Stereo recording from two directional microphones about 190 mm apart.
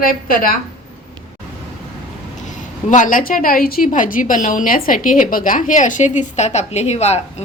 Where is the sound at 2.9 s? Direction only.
45° left (ahead or behind).